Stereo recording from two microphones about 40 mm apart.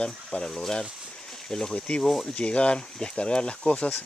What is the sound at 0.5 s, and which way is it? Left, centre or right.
Speech, centre.